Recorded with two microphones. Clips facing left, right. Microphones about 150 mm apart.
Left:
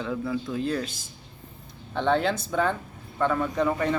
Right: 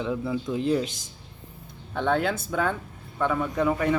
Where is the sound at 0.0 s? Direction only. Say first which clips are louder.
Right 1 dB; 20° right (ahead or behind).